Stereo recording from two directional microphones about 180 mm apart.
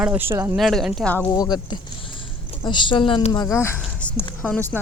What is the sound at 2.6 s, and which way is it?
Speech, 25° left (ahead or behind).